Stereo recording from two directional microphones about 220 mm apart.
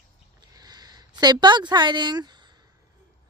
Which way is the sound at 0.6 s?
20° right (ahead or behind).